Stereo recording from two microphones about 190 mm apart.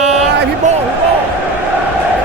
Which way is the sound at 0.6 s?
40° right (ahead or behind).